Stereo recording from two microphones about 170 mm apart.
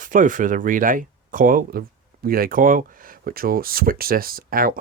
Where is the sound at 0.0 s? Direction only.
50° right (ahead or behind).